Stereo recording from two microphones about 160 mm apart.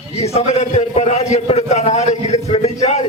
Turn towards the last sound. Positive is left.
turn(degrees=45)  # may be behind; listen again after turning